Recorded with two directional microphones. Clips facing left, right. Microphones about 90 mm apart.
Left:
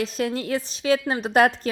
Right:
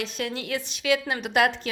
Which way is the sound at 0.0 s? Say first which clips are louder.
Left 5 dB; 40° left (ahead or behind).